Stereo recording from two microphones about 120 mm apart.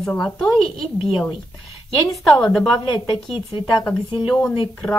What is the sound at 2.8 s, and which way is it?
Speech, 40° left (ahead or behind).